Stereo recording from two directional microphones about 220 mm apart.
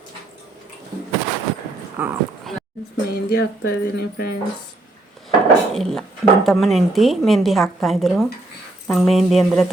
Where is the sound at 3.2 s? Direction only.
45° left (ahead or behind).